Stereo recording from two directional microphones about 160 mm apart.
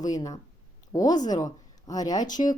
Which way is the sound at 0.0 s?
25° left (ahead or behind).